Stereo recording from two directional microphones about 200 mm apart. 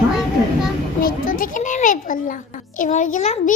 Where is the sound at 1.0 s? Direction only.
45° left (ahead or behind).